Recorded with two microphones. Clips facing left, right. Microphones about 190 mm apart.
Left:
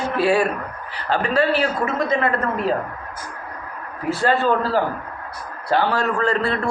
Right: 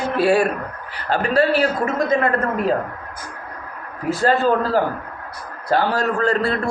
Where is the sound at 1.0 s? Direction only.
40° right (ahead or behind).